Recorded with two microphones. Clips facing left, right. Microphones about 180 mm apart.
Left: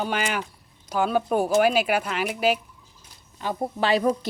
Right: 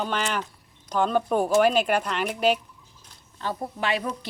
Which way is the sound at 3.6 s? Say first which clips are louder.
Left 7 dB; 30° left (ahead or behind).